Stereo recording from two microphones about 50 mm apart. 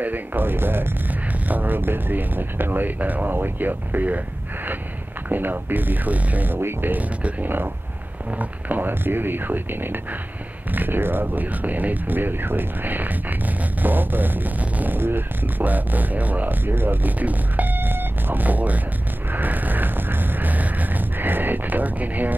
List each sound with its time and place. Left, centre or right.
0.0 s speech: right
5.3 s speech: right
19.3 s a sound: right